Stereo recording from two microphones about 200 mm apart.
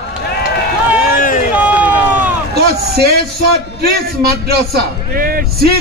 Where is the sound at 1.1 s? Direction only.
45° left (ahead or behind).